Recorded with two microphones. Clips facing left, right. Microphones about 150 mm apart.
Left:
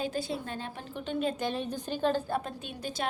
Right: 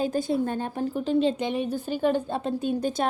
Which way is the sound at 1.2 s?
25° right (ahead or behind).